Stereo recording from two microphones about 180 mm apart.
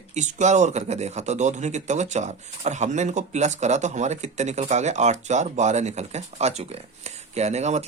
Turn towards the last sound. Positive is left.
turn(degrees=-40)  # may be behind; listen again after turning